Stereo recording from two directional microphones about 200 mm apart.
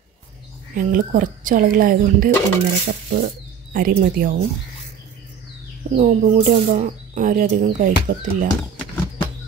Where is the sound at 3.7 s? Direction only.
45° right (ahead or behind).